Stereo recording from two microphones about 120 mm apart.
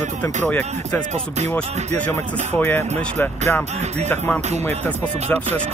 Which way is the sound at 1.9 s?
20° left (ahead or behind).